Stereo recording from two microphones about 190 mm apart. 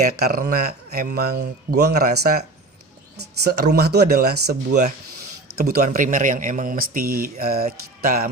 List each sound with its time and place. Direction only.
0.2 s speech: 55° right (ahead or behind)
3.4 s speech: 55° right (ahead or behind)